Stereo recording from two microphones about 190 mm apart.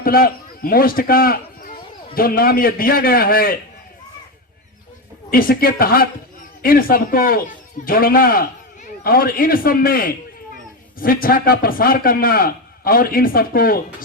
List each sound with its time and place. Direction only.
0.0 s a man's voice: 50° left (ahead or behind)
5.3 s a man's voice: 50° left (ahead or behind)